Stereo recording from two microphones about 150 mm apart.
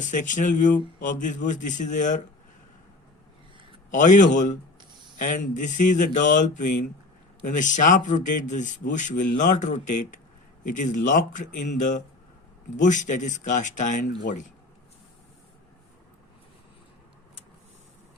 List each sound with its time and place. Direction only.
0.0 s a man's voice: 55° left (ahead or behind)
3.9 s a man's voice: 55° left (ahead or behind)